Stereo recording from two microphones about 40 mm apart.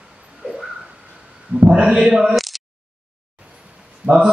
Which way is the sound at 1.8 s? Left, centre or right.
Centre.